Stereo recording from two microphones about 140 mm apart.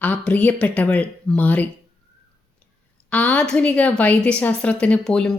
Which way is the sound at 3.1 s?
10° left (ahead or behind).